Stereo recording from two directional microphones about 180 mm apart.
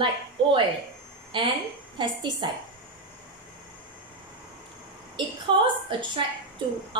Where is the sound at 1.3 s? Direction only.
30° right (ahead or behind).